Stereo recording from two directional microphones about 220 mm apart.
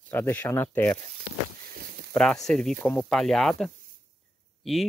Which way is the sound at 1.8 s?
45° right (ahead or behind).